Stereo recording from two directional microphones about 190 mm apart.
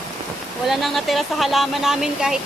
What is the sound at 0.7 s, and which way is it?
Speech, centre (ahead or behind).